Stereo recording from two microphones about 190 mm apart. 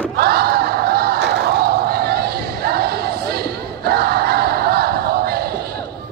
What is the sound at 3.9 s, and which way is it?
Battle cry, 55° right (ahead or behind).